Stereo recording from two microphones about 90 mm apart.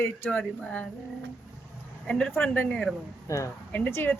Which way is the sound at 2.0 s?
15° left (ahead or behind).